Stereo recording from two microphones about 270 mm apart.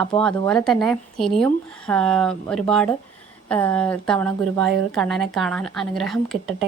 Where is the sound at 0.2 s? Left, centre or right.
Centre.